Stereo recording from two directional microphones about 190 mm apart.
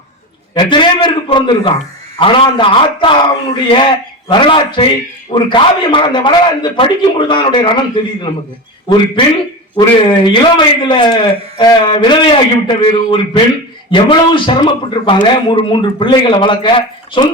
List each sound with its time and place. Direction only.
0.5 s a man's voice: 25° left (ahead or behind)